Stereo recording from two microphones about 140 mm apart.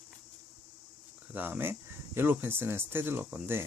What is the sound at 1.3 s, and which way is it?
Speech, 15° right (ahead or behind).